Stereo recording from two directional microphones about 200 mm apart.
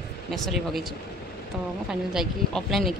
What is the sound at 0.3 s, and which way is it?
Speech, centre (ahead or behind).